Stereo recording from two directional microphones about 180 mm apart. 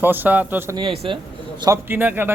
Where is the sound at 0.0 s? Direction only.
10° right (ahead or behind).